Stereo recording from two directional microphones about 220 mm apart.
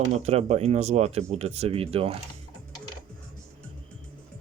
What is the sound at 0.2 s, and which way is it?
Speech, 30° right (ahead or behind).